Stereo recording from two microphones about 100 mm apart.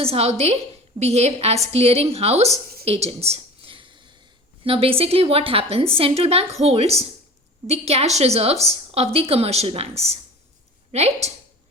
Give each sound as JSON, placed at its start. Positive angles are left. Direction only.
{"t": 0.0, "sound": "a woman's voice", "side_deg": -90}
{"t": 4.6, "sound": "a woman's voice", "side_deg": -70}